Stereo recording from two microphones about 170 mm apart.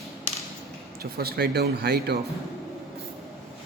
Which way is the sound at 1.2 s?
70° right (ahead or behind).